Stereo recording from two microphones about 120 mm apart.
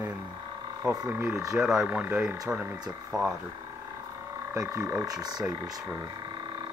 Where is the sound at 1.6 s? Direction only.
Centre (ahead or behind).